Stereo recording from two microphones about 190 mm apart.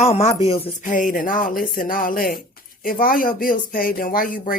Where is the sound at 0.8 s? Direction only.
45° left (ahead or behind).